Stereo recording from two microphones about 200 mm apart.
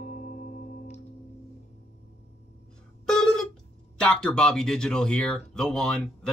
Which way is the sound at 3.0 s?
5° left (ahead or behind).